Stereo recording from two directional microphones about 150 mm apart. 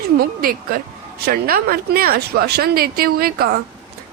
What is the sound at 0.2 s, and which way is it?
A woman's voice, 75° right (ahead or behind).